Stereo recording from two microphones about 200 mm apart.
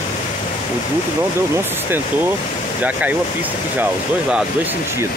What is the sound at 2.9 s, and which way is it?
Speech, 10° right (ahead or behind).